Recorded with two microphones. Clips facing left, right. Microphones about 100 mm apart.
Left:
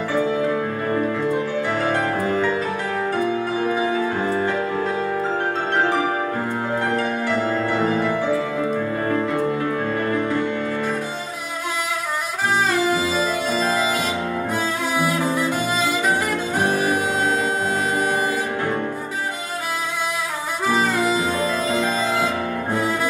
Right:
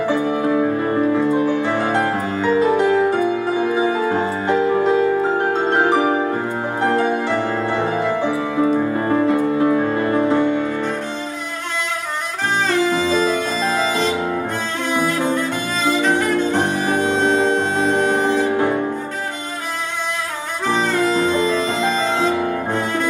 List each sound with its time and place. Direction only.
0.0 s music: 20° right (ahead or behind)
12.6 s saxophone: 5° left (ahead or behind)
14.9 s music: 5° left (ahead or behind)
20.6 s music: 5° left (ahead or behind)